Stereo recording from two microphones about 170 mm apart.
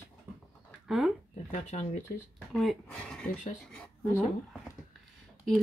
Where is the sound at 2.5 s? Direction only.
Centre (ahead or behind).